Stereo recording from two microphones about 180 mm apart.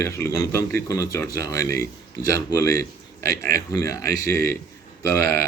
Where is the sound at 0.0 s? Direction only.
15° left (ahead or behind).